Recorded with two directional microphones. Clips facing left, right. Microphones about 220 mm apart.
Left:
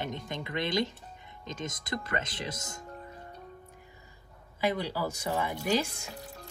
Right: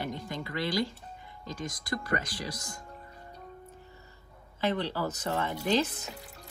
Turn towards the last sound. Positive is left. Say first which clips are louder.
# right 1 dB
turn(degrees=10)  # may be behind; listen again after turning